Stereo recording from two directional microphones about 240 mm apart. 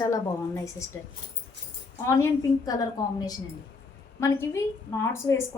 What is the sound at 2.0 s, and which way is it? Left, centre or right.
A woman's voice, centre.